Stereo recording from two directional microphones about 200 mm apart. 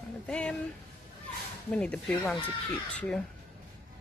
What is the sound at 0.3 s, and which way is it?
Speech, 5° left (ahead or behind).